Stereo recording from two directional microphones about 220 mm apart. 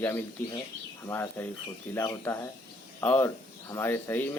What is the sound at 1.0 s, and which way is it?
Speech, 10° left (ahead or behind).